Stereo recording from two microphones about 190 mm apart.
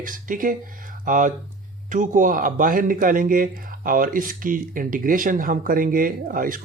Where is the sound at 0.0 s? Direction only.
45° right (ahead or behind).